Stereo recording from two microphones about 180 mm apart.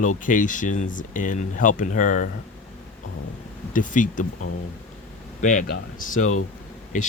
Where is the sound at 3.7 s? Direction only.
45° left (ahead or behind).